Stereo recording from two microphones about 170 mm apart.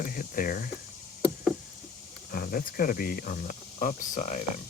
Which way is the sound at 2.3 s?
60° left (ahead or behind).